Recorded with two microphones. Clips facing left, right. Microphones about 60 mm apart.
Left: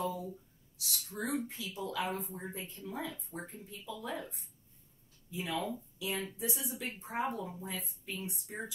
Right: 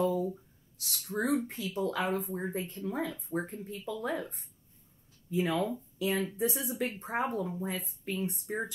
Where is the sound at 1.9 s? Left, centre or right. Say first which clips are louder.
Right 3 dB; right.